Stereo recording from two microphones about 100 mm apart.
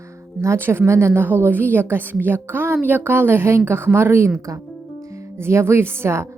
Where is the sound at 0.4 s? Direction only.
25° right (ahead or behind).